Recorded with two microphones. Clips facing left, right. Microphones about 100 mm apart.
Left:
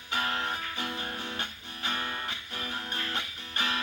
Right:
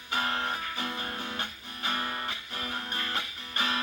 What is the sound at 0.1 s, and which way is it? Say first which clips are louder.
Music: right 1 dB; 30° right (ahead or behind).